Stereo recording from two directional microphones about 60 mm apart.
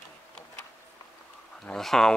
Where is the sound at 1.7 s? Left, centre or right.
Centre.